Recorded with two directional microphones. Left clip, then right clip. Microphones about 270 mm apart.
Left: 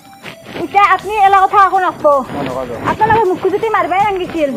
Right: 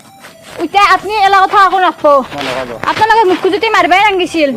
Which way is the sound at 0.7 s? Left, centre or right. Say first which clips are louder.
Right 2 dB; right.